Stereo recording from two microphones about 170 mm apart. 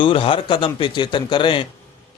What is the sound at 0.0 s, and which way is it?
A man's voice, 30° left (ahead or behind).